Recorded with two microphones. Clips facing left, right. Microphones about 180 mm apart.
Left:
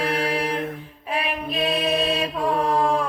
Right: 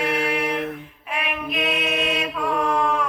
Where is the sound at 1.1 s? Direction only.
35° left (ahead or behind).